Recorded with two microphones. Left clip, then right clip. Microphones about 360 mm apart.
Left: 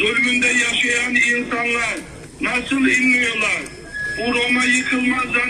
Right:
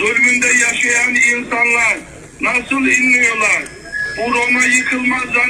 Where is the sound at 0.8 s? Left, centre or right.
Centre.